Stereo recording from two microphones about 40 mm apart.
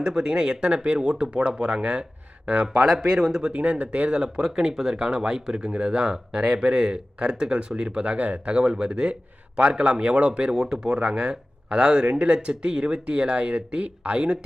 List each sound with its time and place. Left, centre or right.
0.0 s speech: centre
2.6 s speech: centre
3.5 s speech: right
4.4 s speech: centre
7.9 s speech: right
8.5 s speech: right